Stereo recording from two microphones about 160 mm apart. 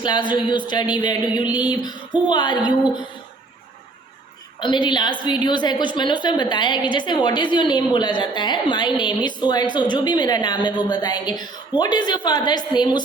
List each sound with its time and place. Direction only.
0.0 s a woman's voice: 30° left (ahead or behind)
4.6 s a woman's voice: 30° left (ahead or behind)